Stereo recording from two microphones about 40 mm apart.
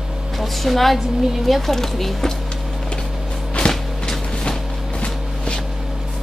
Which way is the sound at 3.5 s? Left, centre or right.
Left.